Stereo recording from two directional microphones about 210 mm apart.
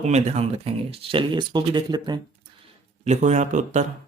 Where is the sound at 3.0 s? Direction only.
35° right (ahead or behind).